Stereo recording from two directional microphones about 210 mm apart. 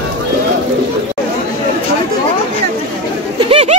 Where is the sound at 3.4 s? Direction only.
25° right (ahead or behind).